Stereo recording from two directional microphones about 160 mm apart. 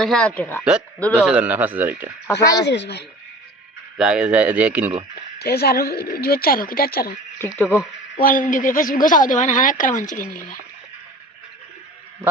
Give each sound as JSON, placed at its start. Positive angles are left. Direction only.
{"t": 0.0, "sound": "speech", "side_deg": 5}
{"t": 1.1, "sound": "speech", "side_deg": -10}
{"t": 2.2, "sound": "speech", "side_deg": 20}
{"t": 2.6, "sound": "speech", "side_deg": 90}
{"t": 3.9, "sound": "speech", "side_deg": -5}
{"t": 5.4, "sound": "speech", "side_deg": 80}
{"t": 7.7, "sound": "speech", "side_deg": 15}
{"t": 8.2, "sound": "a woman's voice", "side_deg": 60}